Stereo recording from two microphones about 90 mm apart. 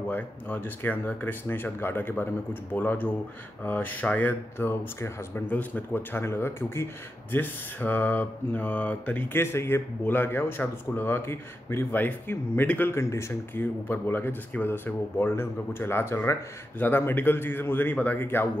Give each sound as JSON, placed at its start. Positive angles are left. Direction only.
{"t": 0.1, "sound": "speech", "side_deg": 20}
{"t": 9.4, "sound": "speech", "side_deg": 25}